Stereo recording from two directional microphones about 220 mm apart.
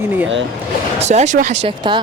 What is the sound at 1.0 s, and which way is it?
Speech, 30° right (ahead or behind).